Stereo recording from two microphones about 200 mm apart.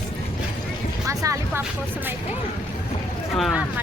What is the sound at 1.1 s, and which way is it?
Speech, 15° right (ahead or behind).